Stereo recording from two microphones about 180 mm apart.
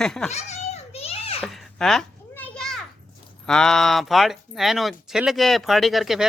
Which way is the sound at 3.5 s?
5° left (ahead or behind).